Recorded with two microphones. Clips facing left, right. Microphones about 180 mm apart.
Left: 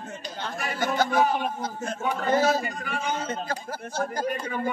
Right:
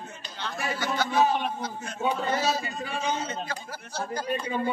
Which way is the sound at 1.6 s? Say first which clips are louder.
Left 1 dB; 50° left (ahead or behind).